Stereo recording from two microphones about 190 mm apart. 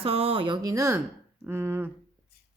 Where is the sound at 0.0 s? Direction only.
30° right (ahead or behind); by 1.9 s 10° right (ahead or behind).